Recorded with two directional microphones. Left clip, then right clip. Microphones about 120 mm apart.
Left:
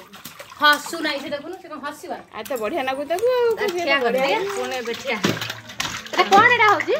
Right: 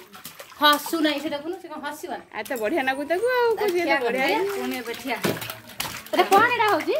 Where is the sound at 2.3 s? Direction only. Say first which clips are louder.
Even; 15° right (ahead or behind).